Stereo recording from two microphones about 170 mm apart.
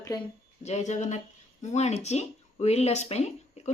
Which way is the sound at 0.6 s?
45° left (ahead or behind).